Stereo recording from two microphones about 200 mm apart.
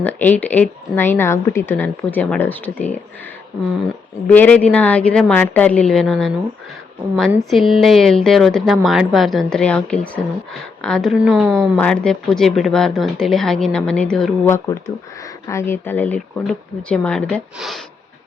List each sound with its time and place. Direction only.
0.0 s a woman's voice: 10° left (ahead or behind)
4.3 s a woman's voice: 5° left (ahead or behind)
7.5 s a woman's voice: centre (ahead or behind)
14.5 s a woman's voice: 15° left (ahead or behind)